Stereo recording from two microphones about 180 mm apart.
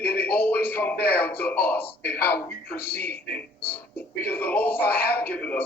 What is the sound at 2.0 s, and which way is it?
Speech, 60° left (ahead or behind).